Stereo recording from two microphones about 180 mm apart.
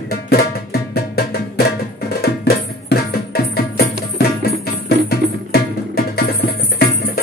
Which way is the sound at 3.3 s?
60° left (ahead or behind).